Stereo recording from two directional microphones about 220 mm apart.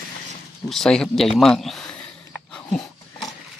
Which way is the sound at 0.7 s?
Centre (ahead or behind).